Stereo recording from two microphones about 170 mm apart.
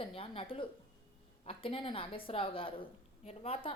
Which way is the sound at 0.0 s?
35° left (ahead or behind).